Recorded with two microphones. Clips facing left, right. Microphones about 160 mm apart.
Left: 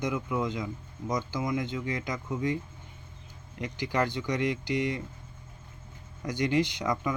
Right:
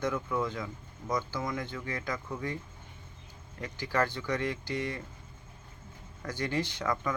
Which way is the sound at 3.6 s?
15° left (ahead or behind).